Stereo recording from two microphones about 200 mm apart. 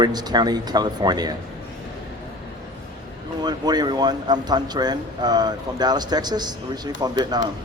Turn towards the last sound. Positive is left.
turn(degrees=-20)  # may be behind; listen again after turning